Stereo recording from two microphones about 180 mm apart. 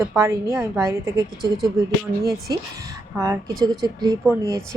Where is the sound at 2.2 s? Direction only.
60° right (ahead or behind).